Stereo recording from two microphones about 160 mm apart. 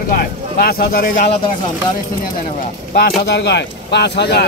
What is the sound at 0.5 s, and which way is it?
Speech, 70° left (ahead or behind).